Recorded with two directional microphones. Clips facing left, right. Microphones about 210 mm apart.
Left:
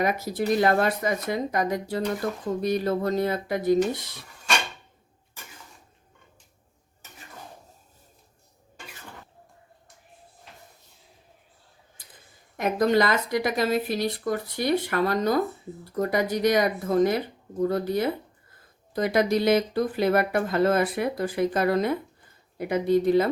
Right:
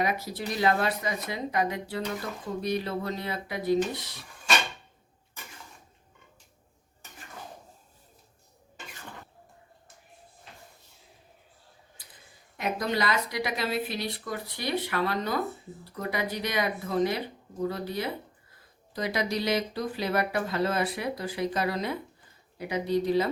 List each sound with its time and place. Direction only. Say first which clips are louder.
0.0 s speech: left 5 dB; 50° left (ahead or behind)
12.5 s speech: left 8 dB; 50° left (ahead or behind)